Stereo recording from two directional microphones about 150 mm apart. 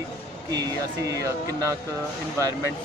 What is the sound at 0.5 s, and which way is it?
Speech, 25° right (ahead or behind).